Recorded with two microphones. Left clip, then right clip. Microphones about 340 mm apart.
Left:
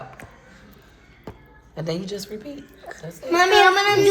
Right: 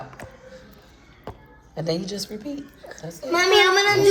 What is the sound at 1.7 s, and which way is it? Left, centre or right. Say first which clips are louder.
Speech: right 2 dB; centre.